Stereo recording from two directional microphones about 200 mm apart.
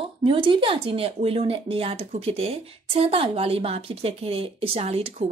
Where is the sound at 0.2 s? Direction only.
25° right (ahead or behind).